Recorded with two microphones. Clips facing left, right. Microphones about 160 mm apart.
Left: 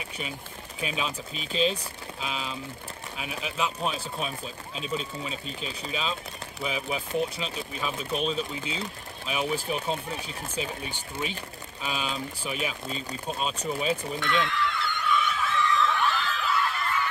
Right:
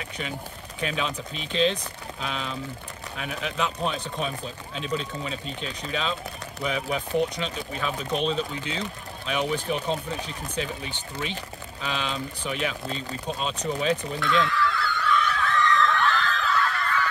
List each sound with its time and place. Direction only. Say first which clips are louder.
0.7 s speech: right 3 dB; 10° left (ahead or behind)
3.2 s speech: right 2 dB; 10° left (ahead or behind)
14.2 s a sound: right 4 dB; 20° left (ahead or behind)
15.3 s screaming: right 3 dB; 5° left (ahead or behind); by 17.1 s 20° left (ahead or behind)